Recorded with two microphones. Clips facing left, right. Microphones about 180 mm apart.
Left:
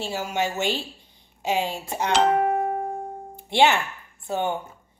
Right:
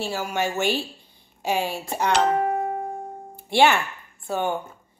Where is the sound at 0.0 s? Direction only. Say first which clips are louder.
Right 1 dB; 20° left (ahead or behind).